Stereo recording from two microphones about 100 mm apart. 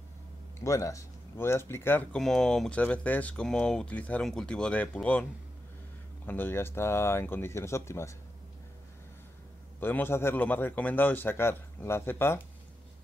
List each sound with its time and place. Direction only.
0.6 s a man's voice: 30° left (ahead or behind)
2.1 s speech: 5° left (ahead or behind)
6.2 s a man's voice: 20° left (ahead or behind)
9.8 s a man's voice: 20° left (ahead or behind)